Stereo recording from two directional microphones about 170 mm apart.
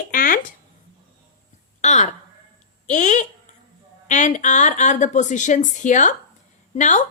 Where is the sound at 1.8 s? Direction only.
40° left (ahead or behind).